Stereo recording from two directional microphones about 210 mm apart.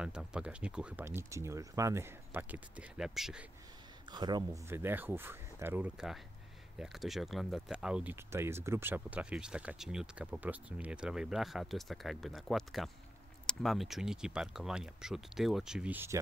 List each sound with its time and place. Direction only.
0.0 s speech: 5° right (ahead or behind)
4.1 s speech: 20° right (ahead or behind)